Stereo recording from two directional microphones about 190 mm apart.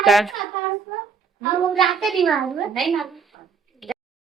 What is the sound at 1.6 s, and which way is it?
A woman's voice, centre (ahead or behind).